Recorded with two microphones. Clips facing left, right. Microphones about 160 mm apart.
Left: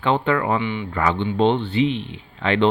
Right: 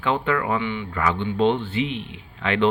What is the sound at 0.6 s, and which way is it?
Speech, 20° left (ahead or behind).